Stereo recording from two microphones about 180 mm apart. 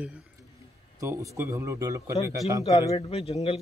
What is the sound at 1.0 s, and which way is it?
A man's voice, 15° right (ahead or behind).